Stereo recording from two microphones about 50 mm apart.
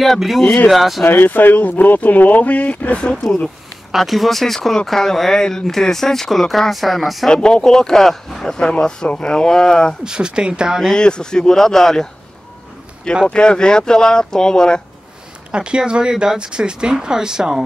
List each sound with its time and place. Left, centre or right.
0.0 s speech: centre
1.0 s speech: left
3.0 s speech: centre
3.9 s speech: centre
7.2 s speech: centre
8.7 s speech: centre
10.0 s speech: centre
11.0 s speech: centre
13.3 s speech: centre
15.5 s speech: centre